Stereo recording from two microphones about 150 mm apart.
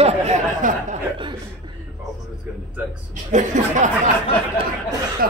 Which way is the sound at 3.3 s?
55° right (ahead or behind).